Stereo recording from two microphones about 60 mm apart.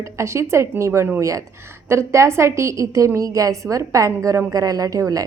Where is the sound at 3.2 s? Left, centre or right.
Right.